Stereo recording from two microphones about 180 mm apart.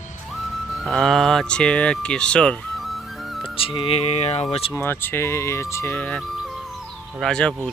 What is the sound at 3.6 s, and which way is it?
Speech, 30° left (ahead or behind).